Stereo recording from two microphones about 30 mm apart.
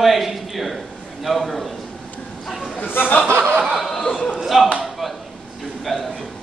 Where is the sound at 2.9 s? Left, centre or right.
Left.